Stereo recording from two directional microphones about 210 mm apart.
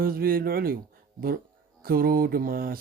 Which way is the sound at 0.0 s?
45° right (ahead or behind).